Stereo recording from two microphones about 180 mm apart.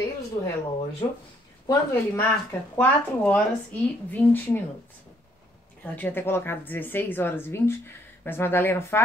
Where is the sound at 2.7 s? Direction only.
10° left (ahead or behind).